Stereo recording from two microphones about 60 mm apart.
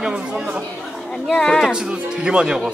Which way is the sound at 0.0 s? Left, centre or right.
Centre.